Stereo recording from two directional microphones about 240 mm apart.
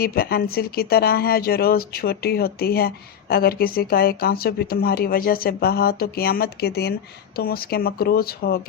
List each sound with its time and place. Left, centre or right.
0.0 s speech: left